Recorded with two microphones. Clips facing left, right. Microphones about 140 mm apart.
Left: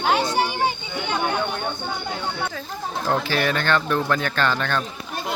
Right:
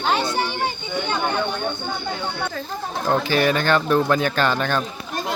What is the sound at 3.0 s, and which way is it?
Speech, centre (ahead or behind).